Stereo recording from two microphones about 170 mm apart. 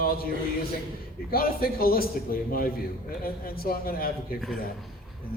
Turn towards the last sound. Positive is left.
turn(degrees=60)  # may be behind; listen again after turning